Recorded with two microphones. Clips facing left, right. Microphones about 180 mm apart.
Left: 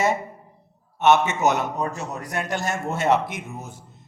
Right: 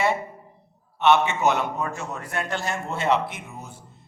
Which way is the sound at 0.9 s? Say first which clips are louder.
Left 1 dB; 45° left (ahead or behind).